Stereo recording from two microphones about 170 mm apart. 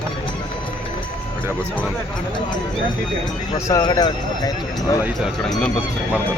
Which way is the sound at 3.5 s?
15° left (ahead or behind).